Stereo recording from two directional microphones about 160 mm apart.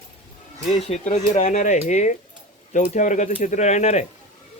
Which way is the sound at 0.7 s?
45° left (ahead or behind).